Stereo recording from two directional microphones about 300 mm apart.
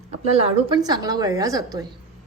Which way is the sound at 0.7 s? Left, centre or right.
Centre.